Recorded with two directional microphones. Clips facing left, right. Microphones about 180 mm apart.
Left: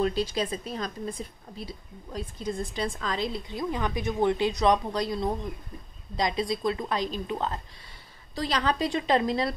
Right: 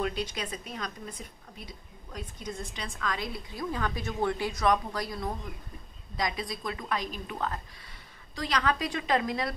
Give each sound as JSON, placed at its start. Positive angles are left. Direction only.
{"t": 0.0, "sound": "a woman's voice", "side_deg": 30}